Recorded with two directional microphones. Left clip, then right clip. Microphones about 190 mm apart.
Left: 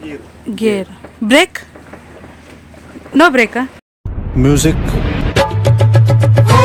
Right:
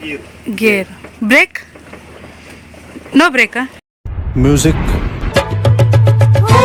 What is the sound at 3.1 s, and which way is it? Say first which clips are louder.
Speech: left 1 dB; centre (ahead or behind).